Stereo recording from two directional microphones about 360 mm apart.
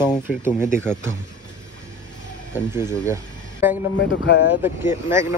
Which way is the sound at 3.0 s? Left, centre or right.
Centre.